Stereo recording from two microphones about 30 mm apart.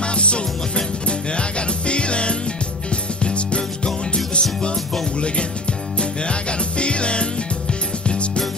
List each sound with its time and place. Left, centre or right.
0.0 s music: left
1.9 s music: left
6.8 s music: left